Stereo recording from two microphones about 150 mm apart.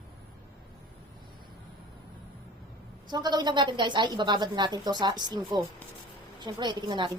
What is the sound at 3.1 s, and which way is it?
A woman's voice, 30° right (ahead or behind).